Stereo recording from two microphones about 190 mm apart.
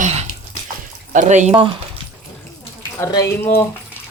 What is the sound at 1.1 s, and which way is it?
Speech, 40° right (ahead or behind).